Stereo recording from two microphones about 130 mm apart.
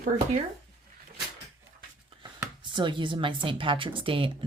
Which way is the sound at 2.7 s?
40° right (ahead or behind).